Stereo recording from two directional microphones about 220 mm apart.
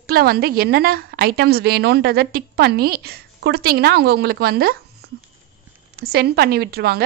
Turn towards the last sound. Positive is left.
turn(degrees=-45)  # may be behind; listen again after turning